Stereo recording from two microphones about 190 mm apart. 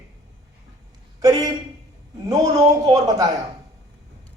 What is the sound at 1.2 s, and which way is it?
A man's voice, 20° right (ahead or behind).